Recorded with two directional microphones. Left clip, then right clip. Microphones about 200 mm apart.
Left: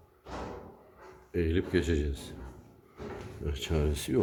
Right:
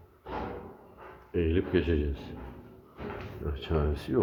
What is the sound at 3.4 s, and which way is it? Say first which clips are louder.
Speech: left 3 dB; 30° left (ahead or behind).